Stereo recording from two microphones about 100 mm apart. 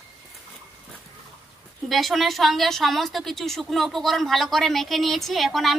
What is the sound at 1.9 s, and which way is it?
A woman's voice, centre (ahead or behind).